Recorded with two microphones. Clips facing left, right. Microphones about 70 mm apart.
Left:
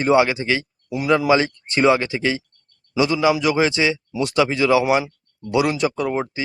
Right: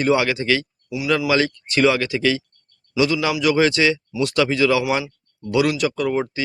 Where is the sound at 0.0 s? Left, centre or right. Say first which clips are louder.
Left 2 dB; left.